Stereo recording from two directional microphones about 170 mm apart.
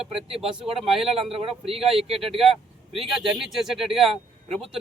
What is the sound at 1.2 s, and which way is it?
Speech, 35° right (ahead or behind).